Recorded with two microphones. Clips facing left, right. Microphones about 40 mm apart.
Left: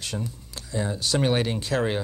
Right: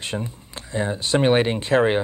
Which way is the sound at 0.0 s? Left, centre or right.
Right.